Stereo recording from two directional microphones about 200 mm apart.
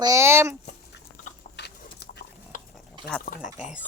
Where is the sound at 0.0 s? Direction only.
15° right (ahead or behind).